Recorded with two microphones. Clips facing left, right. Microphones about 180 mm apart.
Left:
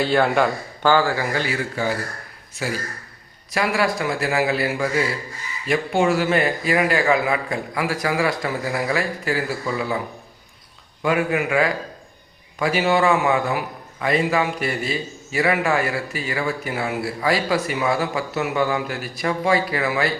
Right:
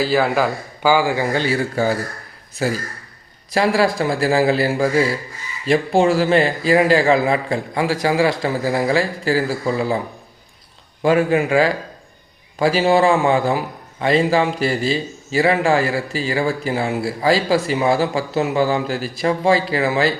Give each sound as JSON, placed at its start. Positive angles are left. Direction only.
{"t": 0.0, "sound": "a man's voice", "side_deg": 0}
{"t": 11.0, "sound": "a man's voice", "side_deg": -30}